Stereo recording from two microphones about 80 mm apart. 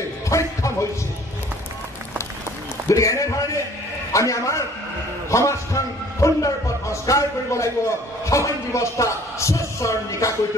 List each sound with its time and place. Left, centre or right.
0.3 s music: left
2.9 s speech: left